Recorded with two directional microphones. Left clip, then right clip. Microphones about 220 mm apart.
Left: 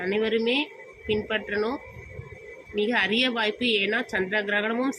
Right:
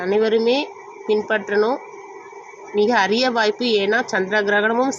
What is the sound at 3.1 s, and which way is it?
Speech, 65° right (ahead or behind).